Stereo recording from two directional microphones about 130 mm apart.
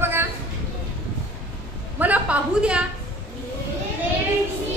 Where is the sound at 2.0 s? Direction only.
10° right (ahead or behind).